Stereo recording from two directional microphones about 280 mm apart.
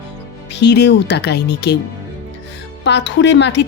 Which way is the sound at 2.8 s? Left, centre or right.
Left.